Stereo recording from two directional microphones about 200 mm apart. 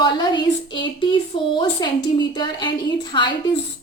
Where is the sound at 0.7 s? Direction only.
25° left (ahead or behind).